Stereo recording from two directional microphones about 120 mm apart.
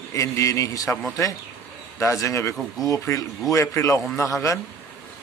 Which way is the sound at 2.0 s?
25° left (ahead or behind).